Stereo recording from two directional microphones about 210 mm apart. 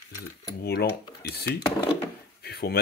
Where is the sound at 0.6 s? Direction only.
50° left (ahead or behind).